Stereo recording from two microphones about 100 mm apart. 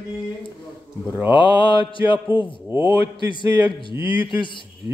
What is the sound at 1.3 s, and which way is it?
Mantra, 55° left (ahead or behind).